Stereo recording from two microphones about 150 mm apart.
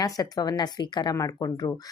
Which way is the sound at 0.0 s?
25° left (ahead or behind).